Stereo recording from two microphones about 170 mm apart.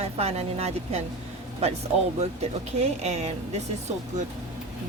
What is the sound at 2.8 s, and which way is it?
Speech, 40° right (ahead or behind).